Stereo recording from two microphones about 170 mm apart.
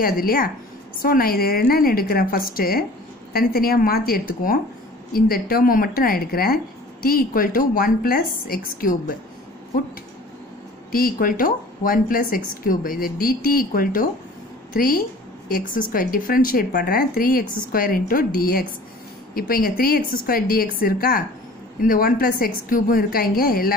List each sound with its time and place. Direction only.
0.0 s a woman's voice: 60° left (ahead or behind)
10.9 s a woman's voice: 60° left (ahead or behind)